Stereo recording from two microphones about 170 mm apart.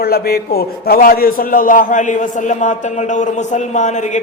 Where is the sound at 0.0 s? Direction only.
65° left (ahead or behind).